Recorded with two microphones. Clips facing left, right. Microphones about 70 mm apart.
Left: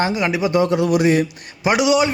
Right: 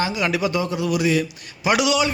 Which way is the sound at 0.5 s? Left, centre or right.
Left.